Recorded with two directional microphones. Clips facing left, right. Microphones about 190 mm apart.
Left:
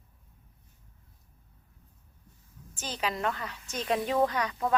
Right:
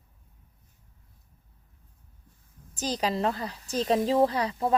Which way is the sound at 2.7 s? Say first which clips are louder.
Right 5 dB; 35° right (ahead or behind).